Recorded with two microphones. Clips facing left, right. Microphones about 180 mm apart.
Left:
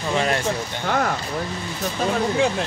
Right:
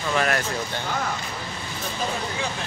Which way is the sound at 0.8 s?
55° left (ahead or behind).